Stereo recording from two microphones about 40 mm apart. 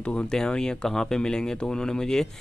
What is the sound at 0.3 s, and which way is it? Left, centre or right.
Speech, centre.